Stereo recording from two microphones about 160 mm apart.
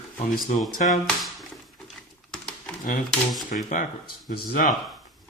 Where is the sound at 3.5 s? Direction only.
50° left (ahead or behind).